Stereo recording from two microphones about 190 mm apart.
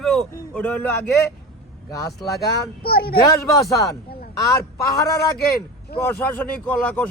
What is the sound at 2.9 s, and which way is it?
Speech, 55° left (ahead or behind).